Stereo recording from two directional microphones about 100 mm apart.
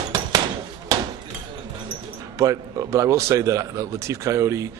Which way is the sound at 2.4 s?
30° right (ahead or behind).